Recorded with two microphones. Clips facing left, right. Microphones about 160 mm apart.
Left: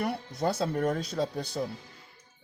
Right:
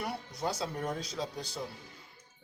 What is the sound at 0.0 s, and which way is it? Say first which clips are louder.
A man's voice: left 6 dB; 60° left (ahead or behind).